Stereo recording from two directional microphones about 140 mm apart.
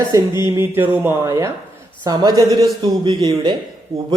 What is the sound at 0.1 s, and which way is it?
A man's voice, 20° right (ahead or behind).